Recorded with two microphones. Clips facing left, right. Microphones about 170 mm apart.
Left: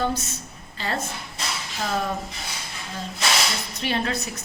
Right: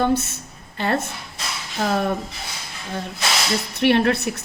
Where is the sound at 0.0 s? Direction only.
60° right (ahead or behind).